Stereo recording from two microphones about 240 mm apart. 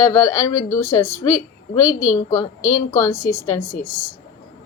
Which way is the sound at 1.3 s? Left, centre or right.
Left.